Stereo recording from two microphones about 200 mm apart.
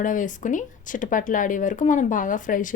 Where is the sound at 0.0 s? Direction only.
40° left (ahead or behind).